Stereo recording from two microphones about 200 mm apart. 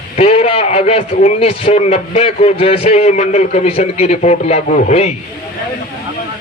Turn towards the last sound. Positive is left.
turn(degrees=35)  # may be behind; listen again after turning